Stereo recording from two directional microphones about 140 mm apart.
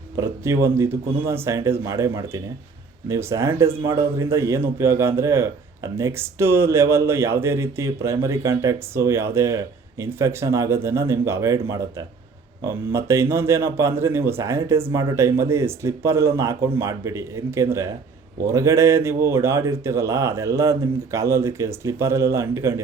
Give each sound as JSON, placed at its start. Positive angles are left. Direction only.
{"t": 0.2, "sound": "a man's voice", "side_deg": -20}